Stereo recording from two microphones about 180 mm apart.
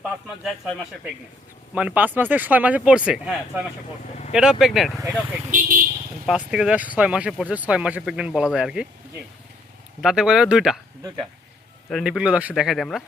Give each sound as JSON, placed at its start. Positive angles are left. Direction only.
{"t": 0.4, "sound": "speech", "side_deg": 0}
{"t": 5.5, "sound": "speech", "side_deg": -45}
{"t": 6.2, "sound": "speech", "side_deg": -5}
{"t": 10.0, "sound": "speech", "side_deg": -5}
{"t": 11.9, "sound": "speech", "side_deg": 0}